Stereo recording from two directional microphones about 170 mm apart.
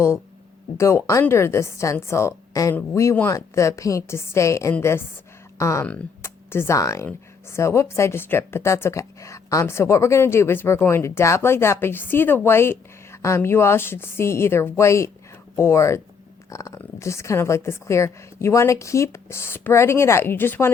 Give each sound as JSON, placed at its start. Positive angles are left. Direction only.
{"t": 0.8, "sound": "speech", "side_deg": 15}